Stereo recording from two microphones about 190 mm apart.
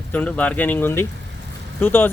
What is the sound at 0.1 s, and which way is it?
Speech, 10° left (ahead or behind).